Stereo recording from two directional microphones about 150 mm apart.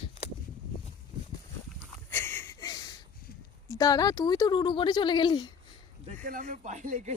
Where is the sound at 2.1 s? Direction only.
15° left (ahead or behind).